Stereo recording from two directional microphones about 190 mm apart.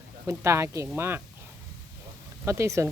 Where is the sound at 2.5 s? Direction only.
15° right (ahead or behind).